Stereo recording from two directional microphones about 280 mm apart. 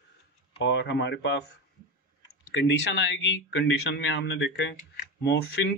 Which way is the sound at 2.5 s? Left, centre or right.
Left.